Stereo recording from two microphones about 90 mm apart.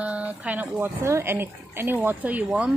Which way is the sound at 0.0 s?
15° right (ahead or behind).